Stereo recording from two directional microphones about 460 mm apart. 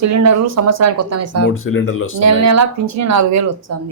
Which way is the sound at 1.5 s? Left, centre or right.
Left.